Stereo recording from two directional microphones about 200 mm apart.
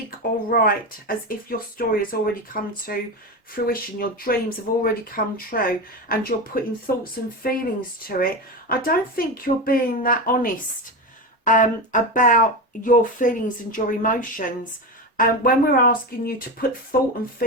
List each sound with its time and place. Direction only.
0.5 s speech: 45° left (ahead or behind)